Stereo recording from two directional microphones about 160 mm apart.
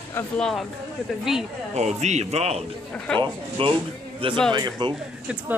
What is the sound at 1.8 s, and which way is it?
A man's voice, 45° right (ahead or behind).